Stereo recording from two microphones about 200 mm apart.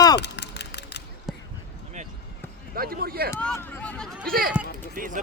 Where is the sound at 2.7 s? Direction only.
50° right (ahead or behind).